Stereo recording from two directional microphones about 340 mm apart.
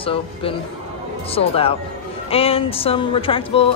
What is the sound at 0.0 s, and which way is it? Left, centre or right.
A woman's voice, centre.